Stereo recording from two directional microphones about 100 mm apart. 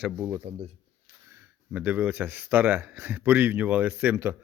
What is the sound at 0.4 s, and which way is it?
Speech, 80° right.